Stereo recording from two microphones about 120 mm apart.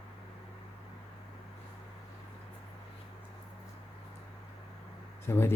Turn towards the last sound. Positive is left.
turn(degrees=20)  # may be behind; listen again after turning